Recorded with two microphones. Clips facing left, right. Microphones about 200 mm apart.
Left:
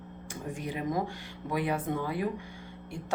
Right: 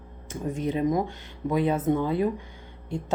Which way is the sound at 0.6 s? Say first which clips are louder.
Right 7 dB; 20° right (ahead or behind).